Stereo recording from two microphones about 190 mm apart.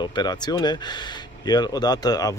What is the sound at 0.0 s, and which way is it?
Speech, 20° left (ahead or behind).